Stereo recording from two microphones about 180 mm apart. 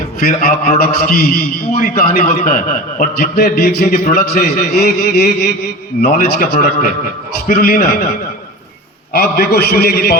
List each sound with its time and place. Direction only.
0.2 s a man's voice: 55° left (ahead or behind)
9.1 s a man's voice: 60° left (ahead or behind)